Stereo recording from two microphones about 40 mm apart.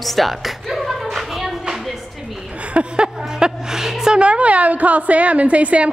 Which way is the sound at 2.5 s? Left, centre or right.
Right.